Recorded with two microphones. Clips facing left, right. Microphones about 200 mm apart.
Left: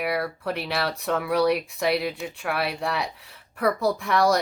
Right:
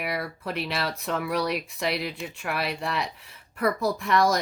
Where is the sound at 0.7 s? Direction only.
60° left (ahead or behind).